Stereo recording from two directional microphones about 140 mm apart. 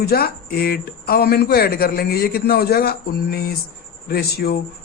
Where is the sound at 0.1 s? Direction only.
90° left.